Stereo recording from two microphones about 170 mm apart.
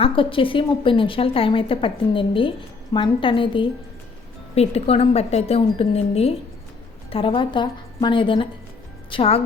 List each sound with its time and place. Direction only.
0.0 s a woman's voice: 30° left (ahead or behind)